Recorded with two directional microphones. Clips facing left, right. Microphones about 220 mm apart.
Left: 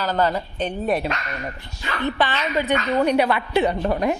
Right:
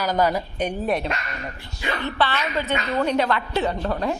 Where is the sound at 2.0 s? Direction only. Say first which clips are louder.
Left 3 dB; 15° left (ahead or behind).